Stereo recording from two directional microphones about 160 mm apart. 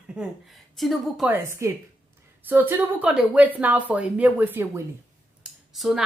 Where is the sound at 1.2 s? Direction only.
15° right (ahead or behind).